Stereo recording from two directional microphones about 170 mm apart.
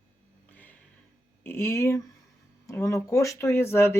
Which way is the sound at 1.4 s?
15° left (ahead or behind).